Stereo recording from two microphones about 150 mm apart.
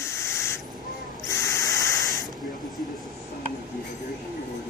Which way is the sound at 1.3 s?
20° left (ahead or behind).